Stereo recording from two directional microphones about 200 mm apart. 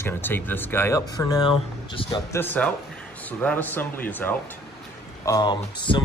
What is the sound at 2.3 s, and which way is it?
Speech, 10° left (ahead or behind).